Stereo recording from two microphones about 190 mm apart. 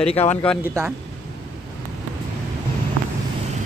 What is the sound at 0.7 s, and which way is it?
Speech, 10° right (ahead or behind).